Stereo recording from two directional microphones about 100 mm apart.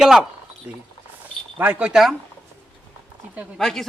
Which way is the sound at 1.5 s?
15° right (ahead or behind).